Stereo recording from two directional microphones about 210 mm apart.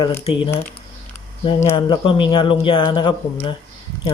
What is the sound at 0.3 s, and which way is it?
Speech, 25° left (ahead or behind).